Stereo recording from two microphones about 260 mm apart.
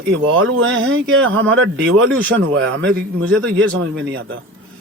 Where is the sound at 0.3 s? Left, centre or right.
Right.